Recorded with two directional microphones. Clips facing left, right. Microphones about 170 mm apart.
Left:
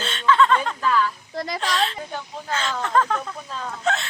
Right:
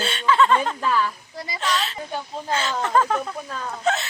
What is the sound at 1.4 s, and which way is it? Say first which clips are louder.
Speech: left 6 dB; 65° left (ahead or behind).